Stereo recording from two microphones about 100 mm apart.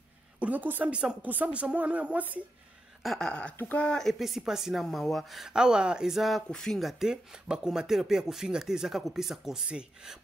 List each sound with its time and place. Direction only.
0.4 s speech: 15° right (ahead or behind)
3.0 s a sound: 5° left (ahead or behind)
3.5 s speech: 15° left (ahead or behind); by 10.1 s 5° right (ahead or behind)